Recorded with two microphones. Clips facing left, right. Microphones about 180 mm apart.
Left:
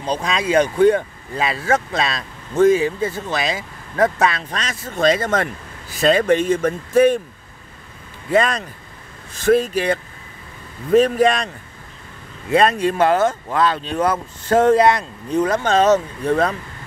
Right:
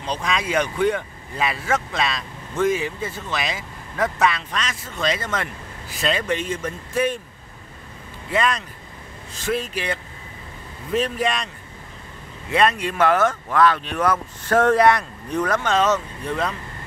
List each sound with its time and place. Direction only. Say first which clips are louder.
0.0 s speech: left 4 dB; 35° left (ahead or behind)
8.3 s speech: left 5 dB; 40° left (ahead or behind); by 15.7 s 25° left (ahead or behind)
15.7 s speech: left 7 dB; 40° left (ahead or behind)